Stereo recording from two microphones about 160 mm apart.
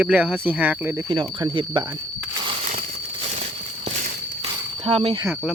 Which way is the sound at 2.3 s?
30° right (ahead or behind).